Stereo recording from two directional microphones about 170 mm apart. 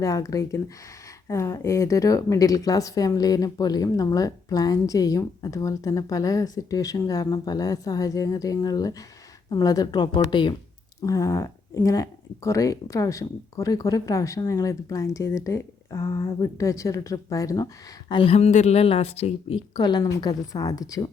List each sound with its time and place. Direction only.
0.0 s a woman's voice: 20° left (ahead or behind)
18.1 s a woman's voice: 35° left (ahead or behind)